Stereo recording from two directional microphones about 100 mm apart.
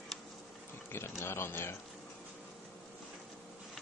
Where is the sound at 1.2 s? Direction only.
25° left (ahead or behind).